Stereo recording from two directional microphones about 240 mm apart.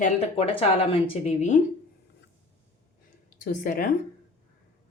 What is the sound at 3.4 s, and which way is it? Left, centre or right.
Speech, left.